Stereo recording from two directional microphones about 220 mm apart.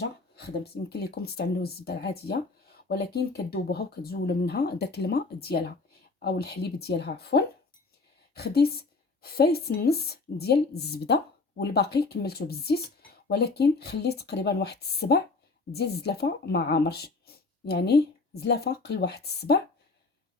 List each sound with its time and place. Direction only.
0.0 s speech: 45° left (ahead or behind)